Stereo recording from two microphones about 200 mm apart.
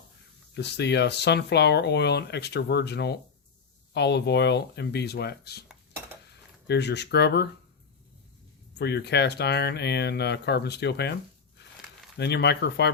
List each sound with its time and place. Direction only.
0.5 s speech: 55° left (ahead or behind)
6.7 s speech: 55° left (ahead or behind)
8.8 s speech: 55° left (ahead or behind)
12.1 s speech: 55° left (ahead or behind)